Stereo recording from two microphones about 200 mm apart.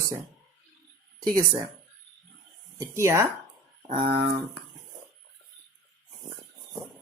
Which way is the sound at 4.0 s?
55° right (ahead or behind).